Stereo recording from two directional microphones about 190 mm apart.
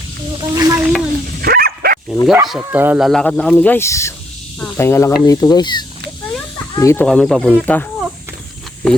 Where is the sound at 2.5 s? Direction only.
10° right (ahead or behind); by 7.0 s 15° left (ahead or behind).